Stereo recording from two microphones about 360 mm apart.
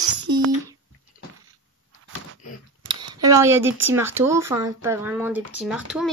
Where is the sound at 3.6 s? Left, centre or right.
Right.